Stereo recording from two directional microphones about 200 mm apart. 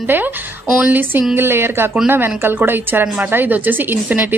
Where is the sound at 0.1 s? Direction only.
10° right (ahead or behind).